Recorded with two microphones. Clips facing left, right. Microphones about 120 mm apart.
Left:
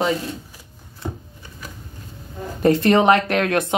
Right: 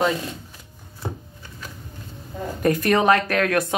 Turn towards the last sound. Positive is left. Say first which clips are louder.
# left 2 dB
turn(degrees=25)  # may be behind; listen again after turning